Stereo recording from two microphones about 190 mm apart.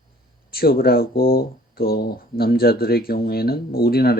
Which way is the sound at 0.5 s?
55° left (ahead or behind).